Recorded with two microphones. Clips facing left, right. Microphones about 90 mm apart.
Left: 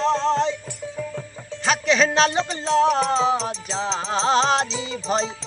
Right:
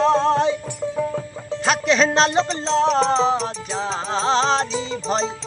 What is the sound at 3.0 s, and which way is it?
Music, 20° right (ahead or behind).